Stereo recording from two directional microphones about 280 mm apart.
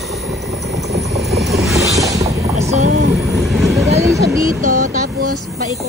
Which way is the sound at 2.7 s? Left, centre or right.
Right.